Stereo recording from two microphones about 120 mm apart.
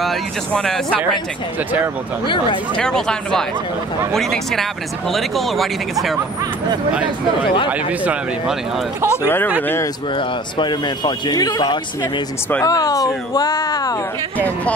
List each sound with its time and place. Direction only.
0.0 s speech: centre (ahead or behind)
2.2 s speech: 45° left (ahead or behind)
2.8 s speech: 5° left (ahead or behind)
7.7 s speech: 10° right (ahead or behind)
9.1 s speech: 20° left (ahead or behind)
10.1 s speech: 40° left (ahead or behind)